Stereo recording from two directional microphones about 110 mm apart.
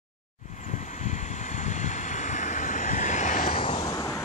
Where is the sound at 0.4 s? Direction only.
90° left; by 3.8 s 60° left (ahead or behind).